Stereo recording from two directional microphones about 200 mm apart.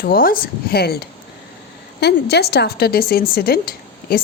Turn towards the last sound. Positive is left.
turn(degrees=50)  # may be behind; listen again after turning